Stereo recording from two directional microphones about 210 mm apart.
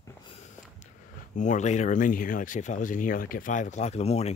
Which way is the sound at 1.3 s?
35° left (ahead or behind).